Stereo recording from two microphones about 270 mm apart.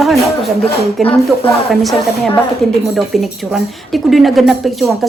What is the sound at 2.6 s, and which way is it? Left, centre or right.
A woman's voice, centre.